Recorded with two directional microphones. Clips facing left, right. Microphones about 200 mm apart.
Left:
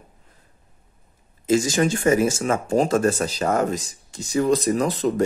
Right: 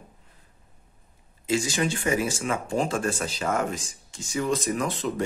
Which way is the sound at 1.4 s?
45° left (ahead or behind).